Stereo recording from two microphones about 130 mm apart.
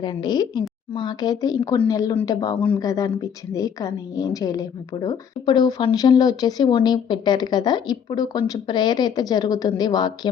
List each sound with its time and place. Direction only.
0.0 s a woman's voice: 35° left (ahead or behind)